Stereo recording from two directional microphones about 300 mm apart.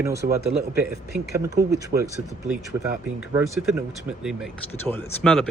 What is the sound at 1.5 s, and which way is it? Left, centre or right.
Speech, right.